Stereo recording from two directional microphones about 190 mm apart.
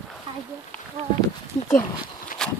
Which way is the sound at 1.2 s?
15° left (ahead or behind).